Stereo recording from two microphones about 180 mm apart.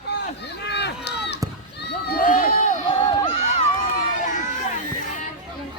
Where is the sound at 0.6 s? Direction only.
70° left (ahead or behind).